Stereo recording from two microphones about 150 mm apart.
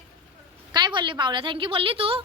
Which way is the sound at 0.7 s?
30° right (ahead or behind).